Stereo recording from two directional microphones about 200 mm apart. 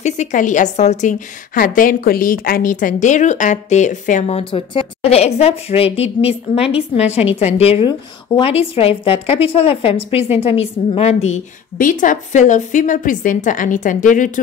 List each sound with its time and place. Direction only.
0.0 s a woman's voice: 35° left (ahead or behind)